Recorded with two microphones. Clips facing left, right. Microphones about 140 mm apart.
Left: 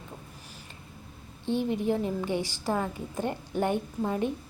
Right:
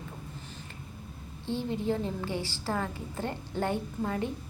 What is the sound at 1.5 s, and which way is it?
A woman's voice, 15° left (ahead or behind).